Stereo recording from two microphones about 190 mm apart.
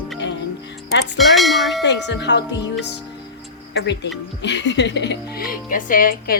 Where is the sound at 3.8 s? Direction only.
65° left (ahead or behind).